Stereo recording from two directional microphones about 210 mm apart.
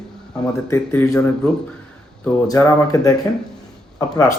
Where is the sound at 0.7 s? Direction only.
10° left (ahead or behind).